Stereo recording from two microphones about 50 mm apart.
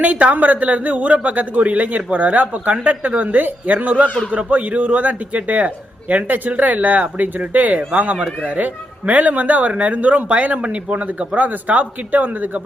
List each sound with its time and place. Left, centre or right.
0.0 s a man's voice: right